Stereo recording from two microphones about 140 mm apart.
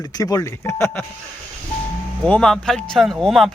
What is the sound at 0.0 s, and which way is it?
Speech, 25° left (ahead or behind).